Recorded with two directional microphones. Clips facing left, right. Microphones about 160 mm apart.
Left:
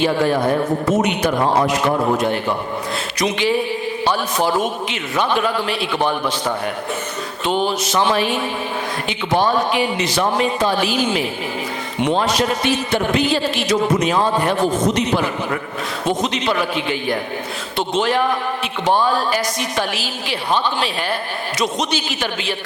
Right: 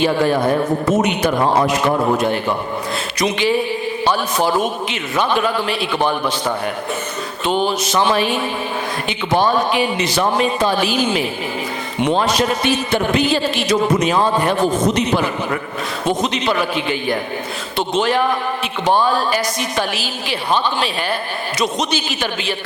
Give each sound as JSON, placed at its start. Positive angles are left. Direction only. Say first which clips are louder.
{"t": 0.0, "sound": "a man's voice", "louder": "right 1 dB", "side_deg": -10}
{"t": 0.4, "sound": "speech", "louder": "right 1 dB", "side_deg": -20}
{"t": 1.0, "sound": "a man's voice", "louder": "right 1 dB", "side_deg": -10}
{"t": 1.4, "sound": "a man's voice", "louder": "right 1 dB", "side_deg": -35}
{"t": 1.6, "sound": "a man's voice", "louder": "right 1 dB", "side_deg": -5}
{"t": 1.9, "sound": "speech", "louder": "right 1 dB", "side_deg": -30}
{"t": 2.1, "sound": "a man's voice", "louder": "right 1 dB", "side_deg": -10}